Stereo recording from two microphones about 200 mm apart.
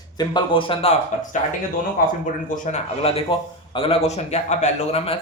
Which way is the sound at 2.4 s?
40° left (ahead or behind).